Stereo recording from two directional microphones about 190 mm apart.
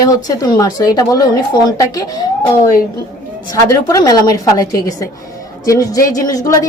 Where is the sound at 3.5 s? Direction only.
15° left (ahead or behind).